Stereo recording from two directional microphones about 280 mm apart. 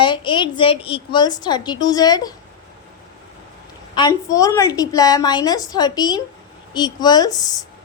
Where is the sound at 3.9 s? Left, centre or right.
Centre.